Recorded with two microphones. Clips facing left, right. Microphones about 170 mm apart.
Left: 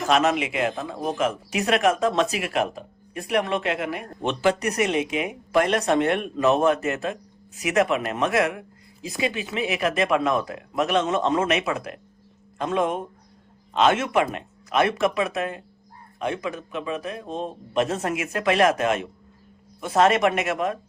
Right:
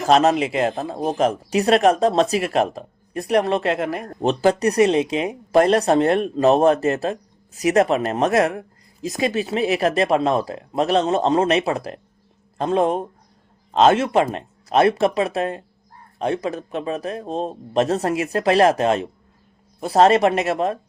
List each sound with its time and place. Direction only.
0.1 s speech: 35° right (ahead or behind)